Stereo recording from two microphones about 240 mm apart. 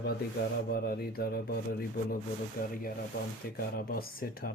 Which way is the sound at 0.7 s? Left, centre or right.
Left.